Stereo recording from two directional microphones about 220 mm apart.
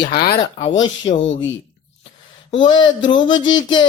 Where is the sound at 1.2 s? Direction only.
60° left (ahead or behind).